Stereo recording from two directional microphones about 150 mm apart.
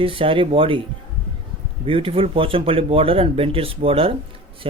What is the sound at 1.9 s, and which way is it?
Speech, 40° right (ahead or behind).